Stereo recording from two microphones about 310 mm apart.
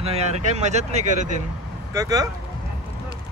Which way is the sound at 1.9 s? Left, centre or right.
Centre.